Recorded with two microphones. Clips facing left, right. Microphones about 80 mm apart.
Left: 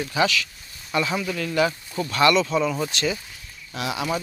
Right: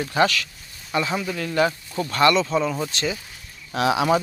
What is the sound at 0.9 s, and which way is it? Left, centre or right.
Speech, right.